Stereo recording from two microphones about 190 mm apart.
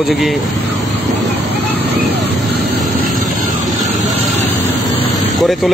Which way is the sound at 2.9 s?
45° right (ahead or behind).